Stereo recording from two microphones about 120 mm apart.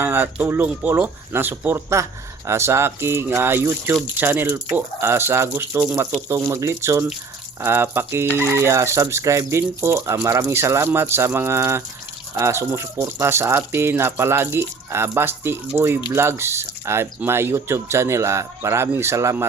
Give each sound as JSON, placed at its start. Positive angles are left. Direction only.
{"t": 0.0, "sound": "speech", "side_deg": -15}